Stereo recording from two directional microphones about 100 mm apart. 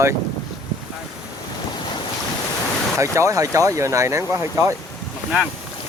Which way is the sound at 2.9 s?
30° right (ahead or behind).